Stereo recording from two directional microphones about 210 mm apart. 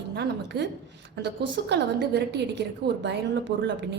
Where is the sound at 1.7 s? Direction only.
55° right (ahead or behind).